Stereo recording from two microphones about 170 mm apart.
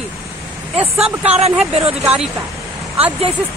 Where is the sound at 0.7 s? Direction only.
35° right (ahead or behind).